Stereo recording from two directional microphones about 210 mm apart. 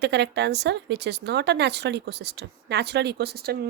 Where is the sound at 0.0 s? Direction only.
55° right (ahead or behind).